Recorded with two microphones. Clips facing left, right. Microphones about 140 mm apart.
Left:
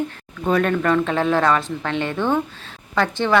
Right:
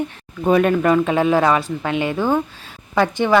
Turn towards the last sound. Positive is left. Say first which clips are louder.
# right 3 dB
turn(degrees=-15)  # may be behind; listen again after turning